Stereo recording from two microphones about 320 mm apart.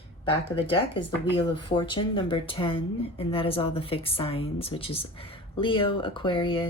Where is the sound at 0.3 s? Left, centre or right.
Centre.